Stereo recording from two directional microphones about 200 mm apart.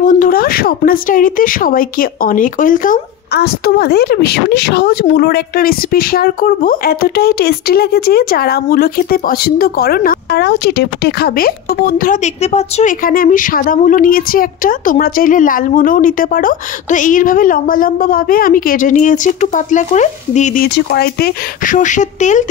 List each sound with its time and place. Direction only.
0.0 s a woman's voice: 40° left (ahead or behind)
13.0 s a woman's voice: 45° left (ahead or behind)